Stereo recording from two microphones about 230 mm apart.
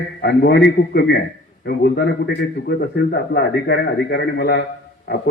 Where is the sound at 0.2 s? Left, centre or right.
Left.